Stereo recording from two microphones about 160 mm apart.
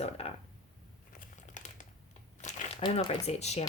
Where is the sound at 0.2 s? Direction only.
40° left (ahead or behind).